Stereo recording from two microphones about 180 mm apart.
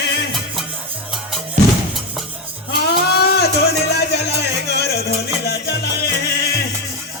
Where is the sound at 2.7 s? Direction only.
65° left (ahead or behind).